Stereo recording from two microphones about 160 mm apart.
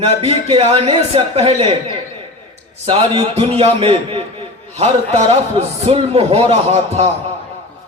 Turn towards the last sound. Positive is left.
turn(degrees=-40)  # may be behind; listen again after turning